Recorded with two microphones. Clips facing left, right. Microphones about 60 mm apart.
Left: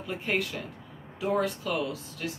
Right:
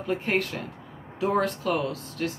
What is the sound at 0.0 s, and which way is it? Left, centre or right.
Speech, right.